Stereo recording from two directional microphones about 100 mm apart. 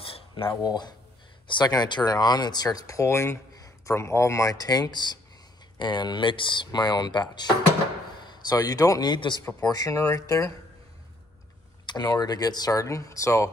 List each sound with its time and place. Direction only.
0.7 s speech: 45° left (ahead or behind)
9.1 s speech: 50° left (ahead or behind)
9.7 s speech: 35° left (ahead or behind)
11.9 s speech: 45° left (ahead or behind)